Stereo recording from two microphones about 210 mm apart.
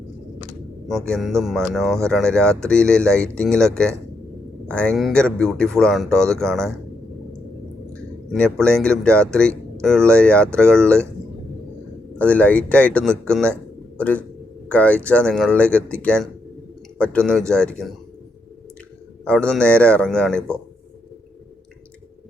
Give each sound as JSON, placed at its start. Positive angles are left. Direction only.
{"t": 0.9, "sound": "speech", "side_deg": 5}
{"t": 4.7, "sound": "speech", "side_deg": 5}
{"t": 8.3, "sound": "speech", "side_deg": 5}
{"t": 12.1, "sound": "a man's voice", "side_deg": 5}
{"t": 19.2, "sound": "speech", "side_deg": 5}